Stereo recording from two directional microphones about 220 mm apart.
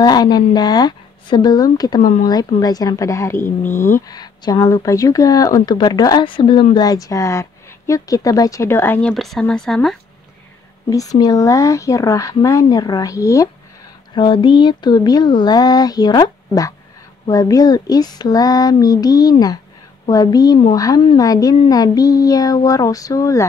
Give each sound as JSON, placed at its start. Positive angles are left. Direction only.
{"t": 0.0, "sound": "speech", "side_deg": 20}
{"t": 10.9, "sound": "speech", "side_deg": 15}